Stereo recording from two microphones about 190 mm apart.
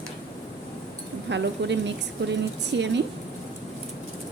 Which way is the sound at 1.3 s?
70° right (ahead or behind).